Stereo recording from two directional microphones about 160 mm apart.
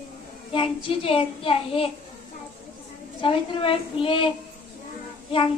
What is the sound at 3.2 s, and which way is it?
A woman's voice, 35° left (ahead or behind).